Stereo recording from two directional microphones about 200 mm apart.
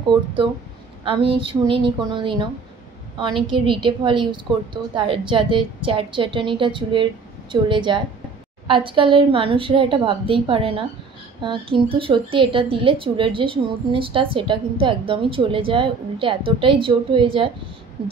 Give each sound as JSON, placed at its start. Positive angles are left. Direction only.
{"t": 1.0, "sound": "a woman's voice", "side_deg": -25}